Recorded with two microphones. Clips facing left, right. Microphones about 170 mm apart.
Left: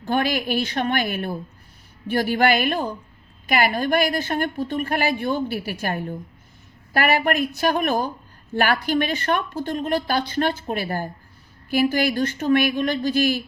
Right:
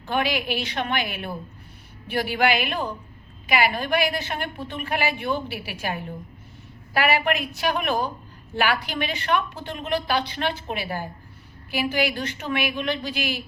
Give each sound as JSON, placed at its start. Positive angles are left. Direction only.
{"t": 0.0, "sound": "a woman's voice", "side_deg": 45}